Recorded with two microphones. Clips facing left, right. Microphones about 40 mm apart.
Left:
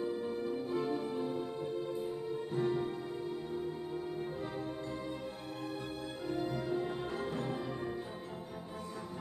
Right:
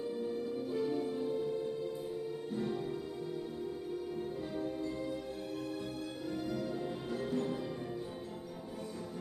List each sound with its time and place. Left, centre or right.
0.2 s music: left
2.5 s music: left
4.2 s music: left
6.3 s music: left